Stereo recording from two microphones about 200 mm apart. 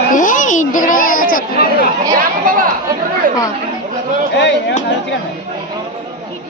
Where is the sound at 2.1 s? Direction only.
45° right (ahead or behind).